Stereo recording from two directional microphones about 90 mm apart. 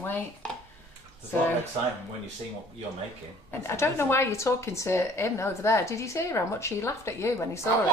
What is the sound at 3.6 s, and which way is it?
Speech, 25° left (ahead or behind).